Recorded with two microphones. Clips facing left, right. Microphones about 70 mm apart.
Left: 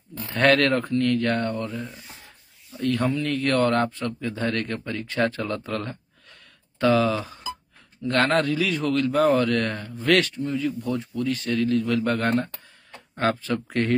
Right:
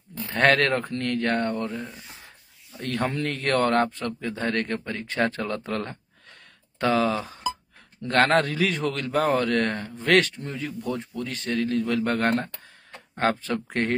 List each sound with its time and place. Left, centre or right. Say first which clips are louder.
0.3 s a man's voice: left 1 dB; right
3.0 s speech: right 2 dB; right
3.3 s a man's voice: left 1 dB; right